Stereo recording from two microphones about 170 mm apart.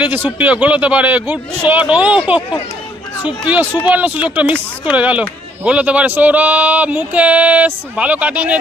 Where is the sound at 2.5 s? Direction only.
25° left (ahead or behind).